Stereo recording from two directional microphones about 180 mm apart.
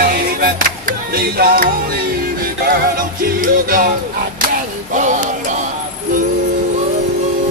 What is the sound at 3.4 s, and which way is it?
Music, 50° right (ahead or behind).